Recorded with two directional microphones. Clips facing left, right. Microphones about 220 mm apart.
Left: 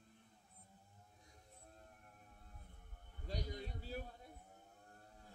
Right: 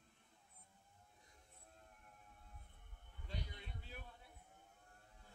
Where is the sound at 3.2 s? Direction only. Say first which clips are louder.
Left 7 dB; 40° left (ahead or behind).